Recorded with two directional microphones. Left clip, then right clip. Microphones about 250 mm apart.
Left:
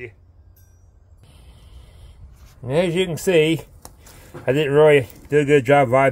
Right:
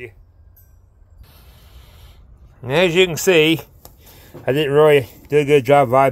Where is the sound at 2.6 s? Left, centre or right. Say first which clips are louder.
Right 5 dB; centre.